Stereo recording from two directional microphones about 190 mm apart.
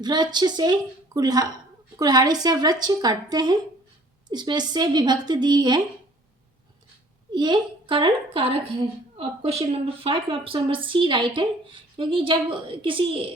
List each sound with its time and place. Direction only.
0.0 s a woman's voice: 20° right (ahead or behind)
7.3 s a woman's voice: 25° right (ahead or behind)